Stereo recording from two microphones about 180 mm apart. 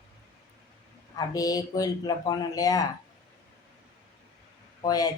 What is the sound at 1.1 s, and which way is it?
Speech, 20° left (ahead or behind).